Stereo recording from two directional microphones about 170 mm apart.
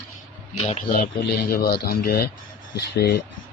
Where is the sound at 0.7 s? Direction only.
40° left (ahead or behind).